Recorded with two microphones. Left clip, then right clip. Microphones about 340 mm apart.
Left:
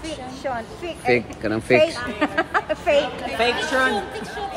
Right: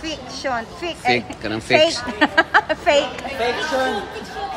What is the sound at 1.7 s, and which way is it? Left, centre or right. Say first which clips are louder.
A woman's voice: right 2 dB; right.